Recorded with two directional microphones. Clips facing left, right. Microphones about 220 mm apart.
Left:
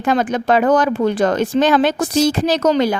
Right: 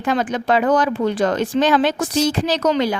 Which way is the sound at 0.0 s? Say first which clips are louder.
Left 3 dB; 45° left (ahead or behind).